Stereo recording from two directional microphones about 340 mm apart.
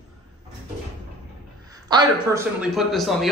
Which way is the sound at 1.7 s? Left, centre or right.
Centre.